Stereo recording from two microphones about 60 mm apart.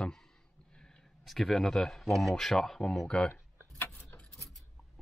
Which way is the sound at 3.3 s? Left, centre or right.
Left.